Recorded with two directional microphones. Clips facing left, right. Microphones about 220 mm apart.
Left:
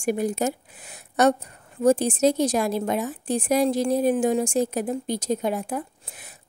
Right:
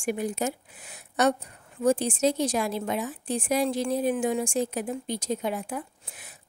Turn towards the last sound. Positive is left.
turn(degrees=40)  # may be behind; listen again after turning